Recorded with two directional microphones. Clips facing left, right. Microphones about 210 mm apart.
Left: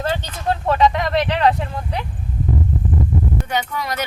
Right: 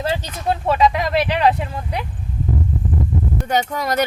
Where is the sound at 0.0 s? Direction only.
10° right (ahead or behind).